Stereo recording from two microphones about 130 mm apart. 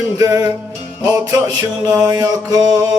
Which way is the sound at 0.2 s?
25° right (ahead or behind).